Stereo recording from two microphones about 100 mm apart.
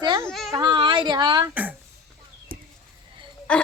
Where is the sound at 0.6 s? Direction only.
55° right (ahead or behind).